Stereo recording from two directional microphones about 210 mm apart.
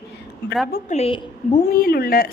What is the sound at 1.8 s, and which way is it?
Speech, 45° left (ahead or behind).